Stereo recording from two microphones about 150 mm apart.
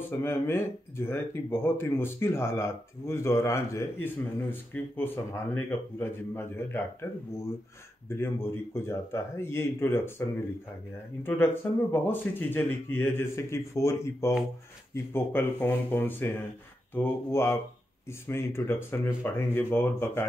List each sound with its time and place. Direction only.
0.1 s speech: 15° left (ahead or behind)
8.1 s speech: 15° left (ahead or behind)
11.2 s speech: 15° left (ahead or behind)